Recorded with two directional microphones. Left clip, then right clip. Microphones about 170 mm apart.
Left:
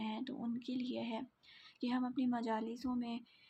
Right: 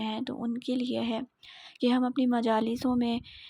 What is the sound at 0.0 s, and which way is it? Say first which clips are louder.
Speech: right 9 dB; 45° right (ahead or behind).